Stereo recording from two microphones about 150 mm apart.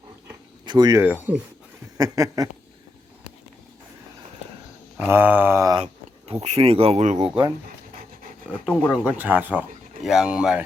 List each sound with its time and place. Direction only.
0.6 s speech: 30° right (ahead or behind)
1.0 s speech: 10° right (ahead or behind)
2.0 s a sound: 25° right (ahead or behind)
4.9 s speech: 15° right (ahead or behind)
5.8 s speech: 45° right (ahead or behind)
8.6 s speech: 5° right (ahead or behind)